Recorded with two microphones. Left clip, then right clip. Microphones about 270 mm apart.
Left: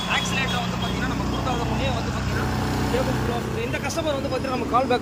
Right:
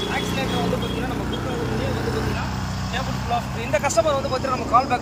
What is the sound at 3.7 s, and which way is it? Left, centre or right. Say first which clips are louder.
Speech: right 9 dB; centre.